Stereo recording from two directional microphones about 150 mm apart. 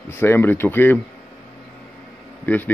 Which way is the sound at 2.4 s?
10° left (ahead or behind).